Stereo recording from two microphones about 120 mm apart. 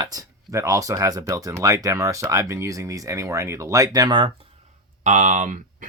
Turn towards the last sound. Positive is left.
turn(degrees=-90)